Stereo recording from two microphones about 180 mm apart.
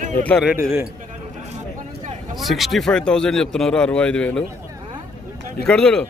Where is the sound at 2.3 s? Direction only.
Centre (ahead or behind).